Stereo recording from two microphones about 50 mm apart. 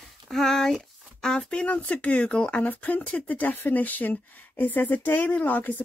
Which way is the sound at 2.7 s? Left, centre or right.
Left.